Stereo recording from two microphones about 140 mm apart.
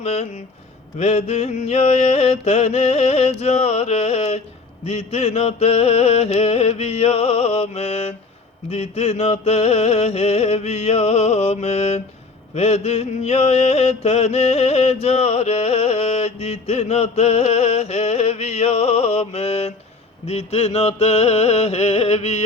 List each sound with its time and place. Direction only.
0.0 s mantra: 50° left (ahead or behind)